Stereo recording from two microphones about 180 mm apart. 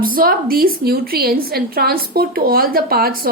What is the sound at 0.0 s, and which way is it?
A woman's voice, 55° right (ahead or behind).